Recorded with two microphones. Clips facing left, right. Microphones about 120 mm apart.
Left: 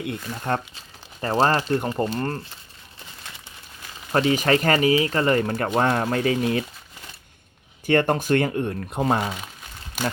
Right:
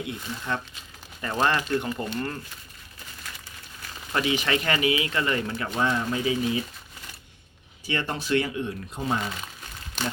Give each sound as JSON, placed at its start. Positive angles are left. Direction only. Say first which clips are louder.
{"t": 0.0, "sound": "speech", "louder": "left 4 dB", "side_deg": 55}
{"t": 0.7, "sound": "speech", "louder": "left 1 dB", "side_deg": 35}
{"t": 4.1, "sound": "speech", "louder": "left 6 dB", "side_deg": 40}
{"t": 5.6, "sound": "speech", "louder": "left 2 dB", "side_deg": 55}
{"t": 7.9, "sound": "speech", "louder": "left 8 dB", "side_deg": 55}